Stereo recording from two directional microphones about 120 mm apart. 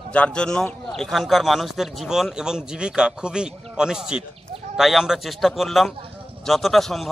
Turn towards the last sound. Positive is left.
turn(degrees=0)  # may be behind; listen again after turning